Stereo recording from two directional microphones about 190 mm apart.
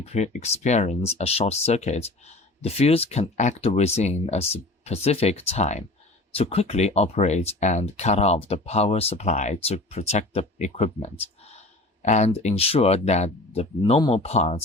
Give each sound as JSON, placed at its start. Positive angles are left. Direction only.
{"t": 0.0, "sound": "speech", "side_deg": 35}